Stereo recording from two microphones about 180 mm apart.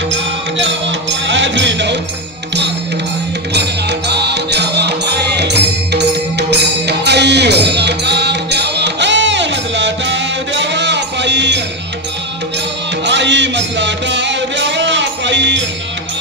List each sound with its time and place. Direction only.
0.1 s music: 90° right
4.1 s music: 70° right (ahead or behind)
13.0 s music: 75° right (ahead or behind)